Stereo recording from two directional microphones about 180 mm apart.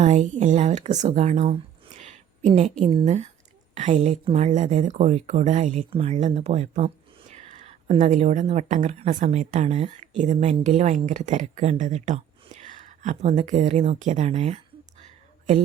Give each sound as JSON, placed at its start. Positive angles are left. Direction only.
{"t": 0.0, "sound": "a woman's voice", "side_deg": -40}